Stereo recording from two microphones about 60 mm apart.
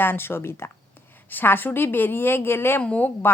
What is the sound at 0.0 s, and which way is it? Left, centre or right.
Speech, left.